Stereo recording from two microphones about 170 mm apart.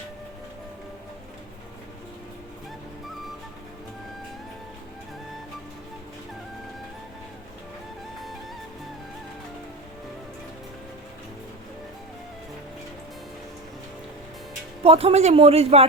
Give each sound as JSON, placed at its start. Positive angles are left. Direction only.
{"t": 14.8, "sound": "a man's voice", "side_deg": -35}